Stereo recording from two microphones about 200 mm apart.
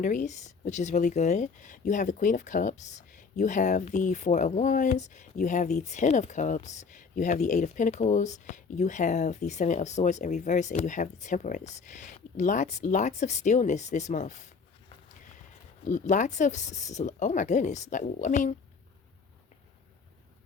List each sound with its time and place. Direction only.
0.0 s speech: 40° left (ahead or behind)
15.8 s speech: 35° left (ahead or behind)